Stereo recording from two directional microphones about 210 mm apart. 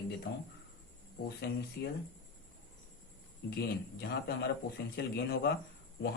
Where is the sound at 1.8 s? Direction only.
50° left (ahead or behind).